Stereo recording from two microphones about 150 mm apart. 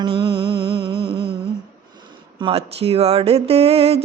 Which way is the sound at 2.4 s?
35° right (ahead or behind).